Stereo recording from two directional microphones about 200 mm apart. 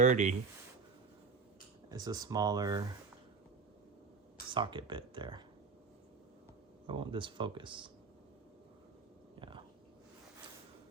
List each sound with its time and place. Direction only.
0.0 s speech: 35° right (ahead or behind)
1.9 s speech: 20° right (ahead or behind)
4.5 s speech: 25° right (ahead or behind)
6.8 s speech: 25° right (ahead or behind)
9.4 s a sound: 25° right (ahead or behind)